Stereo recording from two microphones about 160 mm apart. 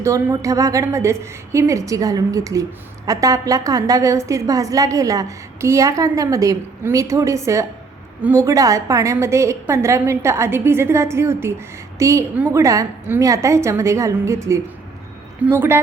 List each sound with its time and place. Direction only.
0.0 s a woman's voice: 15° right (ahead or behind)